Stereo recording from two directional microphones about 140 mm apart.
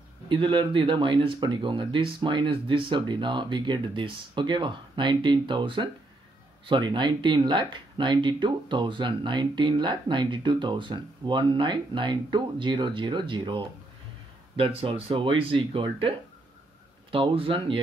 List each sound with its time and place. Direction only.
0.3 s speech: 35° right (ahead or behind)